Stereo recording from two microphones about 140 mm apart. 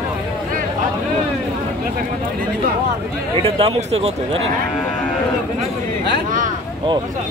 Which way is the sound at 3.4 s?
45° right (ahead or behind).